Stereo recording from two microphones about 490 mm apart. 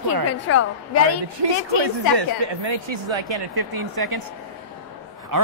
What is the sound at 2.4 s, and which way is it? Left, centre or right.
Speech, right.